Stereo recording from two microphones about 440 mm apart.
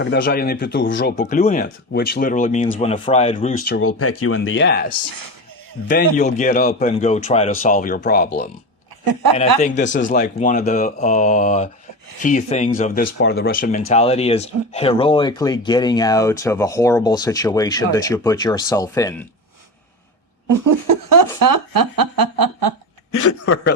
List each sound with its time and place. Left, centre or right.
0.0 s speech: left
6.1 s speech: centre
9.6 s speech: centre
20.5 s speech: right